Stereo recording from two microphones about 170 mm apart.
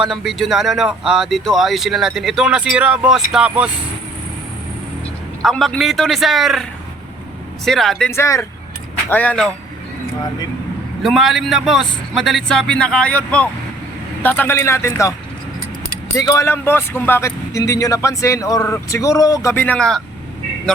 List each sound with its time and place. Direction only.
0.0 s speech: centre (ahead or behind)
5.4 s speech: centre (ahead or behind)
8.1 s speech: 15° left (ahead or behind)
11.0 s speech: centre (ahead or behind); by 15.1 s 15° left (ahead or behind)
16.1 s speech: 15° left (ahead or behind)